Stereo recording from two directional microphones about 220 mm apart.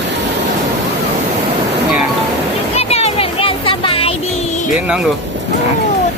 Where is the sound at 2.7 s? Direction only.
30° left (ahead or behind).